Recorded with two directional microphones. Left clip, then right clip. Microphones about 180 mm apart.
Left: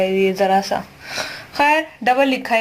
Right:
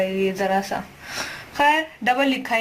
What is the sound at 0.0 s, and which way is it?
Speech, 30° left (ahead or behind).